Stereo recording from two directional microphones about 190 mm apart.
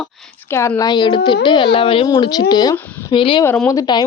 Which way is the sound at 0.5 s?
15° left (ahead or behind).